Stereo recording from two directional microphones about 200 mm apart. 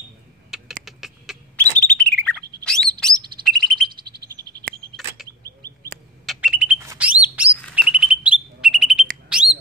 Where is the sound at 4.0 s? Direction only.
50° right (ahead or behind).